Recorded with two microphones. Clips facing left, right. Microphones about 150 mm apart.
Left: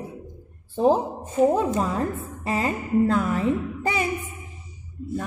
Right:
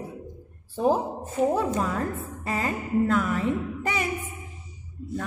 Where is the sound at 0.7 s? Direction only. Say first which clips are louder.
Left 3 dB; 25° left (ahead or behind).